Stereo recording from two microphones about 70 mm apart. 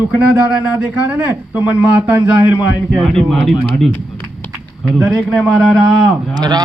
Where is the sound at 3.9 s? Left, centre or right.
Left.